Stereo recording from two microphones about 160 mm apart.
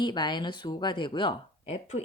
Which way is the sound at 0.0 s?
30° left (ahead or behind).